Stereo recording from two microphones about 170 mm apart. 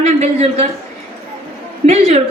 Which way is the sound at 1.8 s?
40° right (ahead or behind).